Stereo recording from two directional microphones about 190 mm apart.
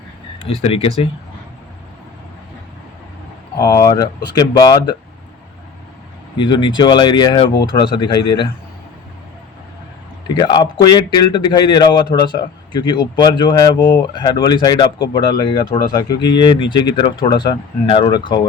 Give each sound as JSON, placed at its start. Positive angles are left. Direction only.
{"t": 0.4, "sound": "speech", "side_deg": 30}
{"t": 3.6, "sound": "speech", "side_deg": 15}
{"t": 6.3, "sound": "speech", "side_deg": 25}
{"t": 10.2, "sound": "speech", "side_deg": 20}